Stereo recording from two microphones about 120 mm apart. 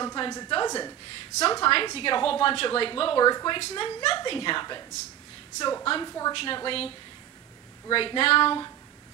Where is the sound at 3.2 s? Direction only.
35° left (ahead or behind).